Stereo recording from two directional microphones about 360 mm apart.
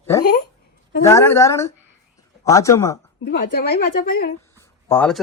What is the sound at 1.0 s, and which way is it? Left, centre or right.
A woman's voice, centre.